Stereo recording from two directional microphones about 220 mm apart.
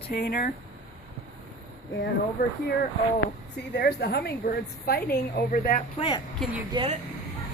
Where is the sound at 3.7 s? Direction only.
45° left (ahead or behind).